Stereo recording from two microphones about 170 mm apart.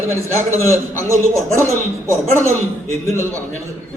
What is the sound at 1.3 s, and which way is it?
A man's voice, 15° right (ahead or behind).